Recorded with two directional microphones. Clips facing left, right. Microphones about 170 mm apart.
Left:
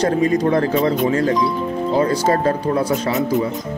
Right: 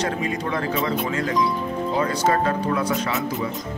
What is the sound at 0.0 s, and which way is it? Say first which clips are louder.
A man's voice: left 9 dB; 40° left (ahead or behind).